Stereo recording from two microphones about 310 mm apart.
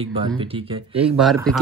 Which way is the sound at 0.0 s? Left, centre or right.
Centre.